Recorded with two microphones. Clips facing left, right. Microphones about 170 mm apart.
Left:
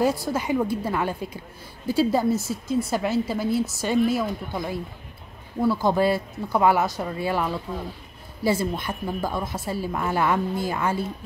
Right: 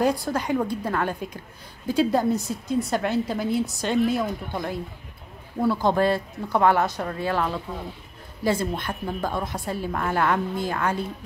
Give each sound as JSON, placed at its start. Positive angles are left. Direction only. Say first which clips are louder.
{"t": 0.2, "sound": "a woman's voice", "louder": "left 1 dB", "side_deg": 5}
{"t": 5.9, "sound": "a woman's voice", "louder": "even", "side_deg": 10}